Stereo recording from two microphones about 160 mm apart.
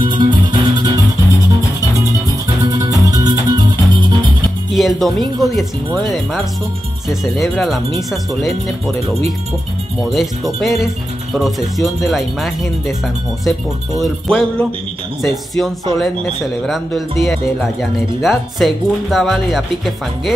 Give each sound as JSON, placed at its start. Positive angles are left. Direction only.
{"t": 0.0, "sound": "music", "side_deg": -30}
{"t": 2.7, "sound": "music", "side_deg": -20}
{"t": 4.7, "sound": "music", "side_deg": 0}
{"t": 5.4, "sound": "speech", "side_deg": 0}
{"t": 10.1, "sound": "speech", "side_deg": 0}